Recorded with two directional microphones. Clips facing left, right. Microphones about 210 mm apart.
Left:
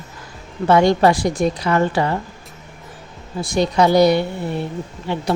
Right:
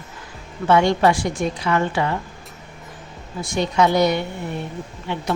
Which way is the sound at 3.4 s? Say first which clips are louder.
Left 3 dB; 35° left (ahead or behind).